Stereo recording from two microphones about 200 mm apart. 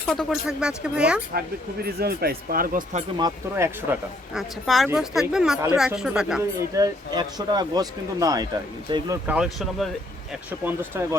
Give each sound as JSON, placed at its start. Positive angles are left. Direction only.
{"t": 0.1, "sound": "speech", "side_deg": 0}
{"t": 1.3, "sound": "speech", "side_deg": -50}
{"t": 3.2, "sound": "speech", "side_deg": -15}
{"t": 4.4, "sound": "speech", "side_deg": 0}
{"t": 6.7, "sound": "speech", "side_deg": -20}
{"t": 9.2, "sound": "speech", "side_deg": -5}
{"t": 10.7, "sound": "speech", "side_deg": -10}